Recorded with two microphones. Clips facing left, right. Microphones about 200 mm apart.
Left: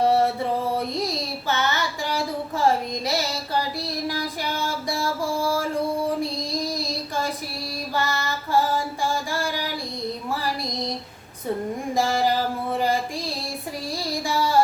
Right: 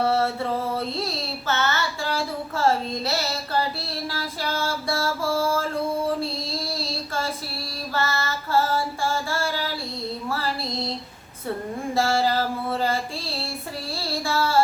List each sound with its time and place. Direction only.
0.0 s music: 15° left (ahead or behind)
0.8 s child singing: 15° left (ahead or behind)
7.7 s female singing: 15° left (ahead or behind)
11.9 s a sound: 15° left (ahead or behind)
13.9 s child singing: 15° left (ahead or behind)